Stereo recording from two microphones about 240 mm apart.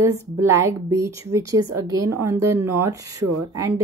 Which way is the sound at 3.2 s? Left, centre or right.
Right.